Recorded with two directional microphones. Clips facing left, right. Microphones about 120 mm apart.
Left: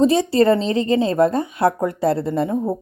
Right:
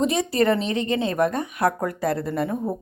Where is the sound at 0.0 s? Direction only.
30° left (ahead or behind).